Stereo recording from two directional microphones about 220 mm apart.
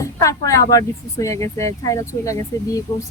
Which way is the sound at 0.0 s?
15° left (ahead or behind).